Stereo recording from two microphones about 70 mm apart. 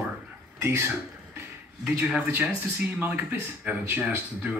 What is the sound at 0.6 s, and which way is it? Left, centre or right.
Speech, right.